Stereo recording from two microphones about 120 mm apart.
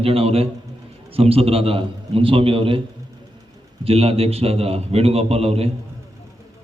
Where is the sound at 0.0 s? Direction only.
55° right (ahead or behind).